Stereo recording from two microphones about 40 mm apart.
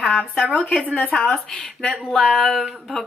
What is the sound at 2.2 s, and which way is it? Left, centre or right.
Speech, centre.